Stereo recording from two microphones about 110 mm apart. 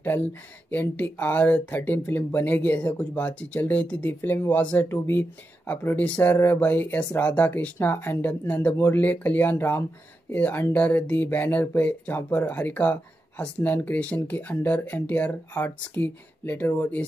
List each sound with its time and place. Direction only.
0.0 s speech: 20° left (ahead or behind)